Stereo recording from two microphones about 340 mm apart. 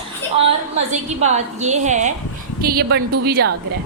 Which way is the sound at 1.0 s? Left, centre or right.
Centre.